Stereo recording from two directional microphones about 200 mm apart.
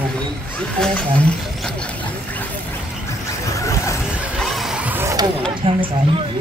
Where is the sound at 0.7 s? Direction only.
5° left (ahead or behind).